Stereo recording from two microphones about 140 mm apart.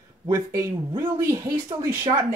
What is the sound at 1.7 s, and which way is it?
Speech, 35° right (ahead or behind).